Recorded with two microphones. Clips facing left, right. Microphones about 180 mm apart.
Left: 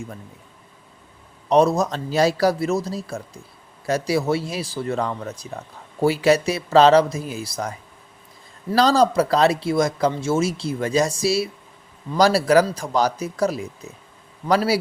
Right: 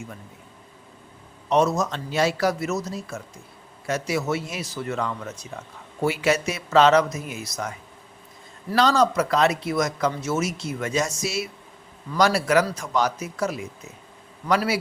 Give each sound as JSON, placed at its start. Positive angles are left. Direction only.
{"t": 1.5, "sound": "speech", "side_deg": 35}